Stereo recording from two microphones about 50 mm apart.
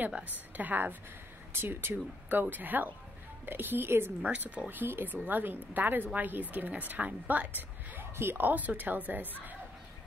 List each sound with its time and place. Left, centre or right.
0.6 s speech: right
1.5 s speech: right
8.0 s a woman's voice: right
8.5 s speech: right